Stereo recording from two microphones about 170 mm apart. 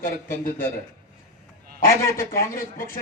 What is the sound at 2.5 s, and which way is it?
Speech, 55° left (ahead or behind).